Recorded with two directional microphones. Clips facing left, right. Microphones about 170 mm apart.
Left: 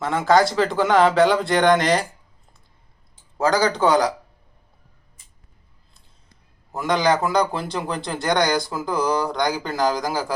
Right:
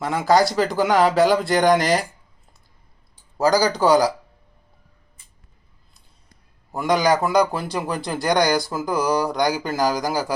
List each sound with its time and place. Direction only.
0.0 s speech: 5° right (ahead or behind)
3.3 s speech: 5° right (ahead or behind)
6.8 s speech: 10° right (ahead or behind)